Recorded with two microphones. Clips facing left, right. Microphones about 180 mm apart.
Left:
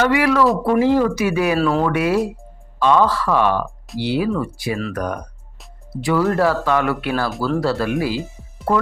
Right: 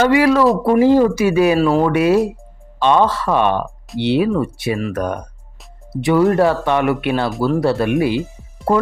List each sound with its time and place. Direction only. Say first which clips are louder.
0.0 s speech: right 3 dB; 30° right (ahead or behind)
1.5 s speech: right 3 dB; 10° right (ahead or behind)
1.8 s speech: right 4 dB; 25° right (ahead or behind)